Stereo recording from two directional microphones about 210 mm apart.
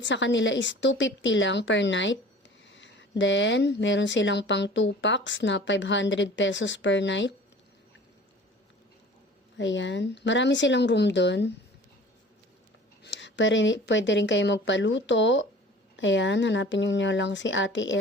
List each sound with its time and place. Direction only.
0.0 s speech: 60° left (ahead or behind)
9.6 s speech: 60° left (ahead or behind)
13.0 s speech: 60° left (ahead or behind)